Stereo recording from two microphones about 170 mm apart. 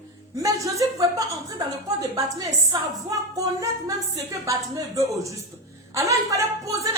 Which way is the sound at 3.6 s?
20° right (ahead or behind).